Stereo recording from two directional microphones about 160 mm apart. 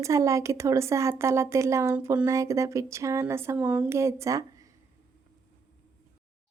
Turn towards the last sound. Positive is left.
turn(degrees=-20)  # may be behind; listen again after turning